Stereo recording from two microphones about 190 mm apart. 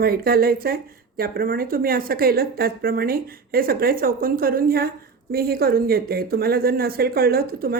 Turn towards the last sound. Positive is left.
turn(degrees=-50)  # may be behind; listen again after turning